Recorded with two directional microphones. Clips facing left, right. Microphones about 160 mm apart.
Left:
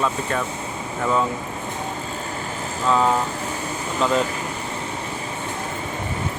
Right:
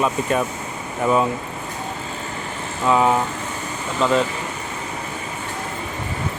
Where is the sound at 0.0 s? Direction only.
20° right (ahead or behind).